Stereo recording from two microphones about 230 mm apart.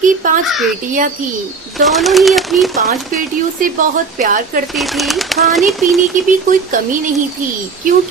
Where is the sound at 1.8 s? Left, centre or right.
Centre.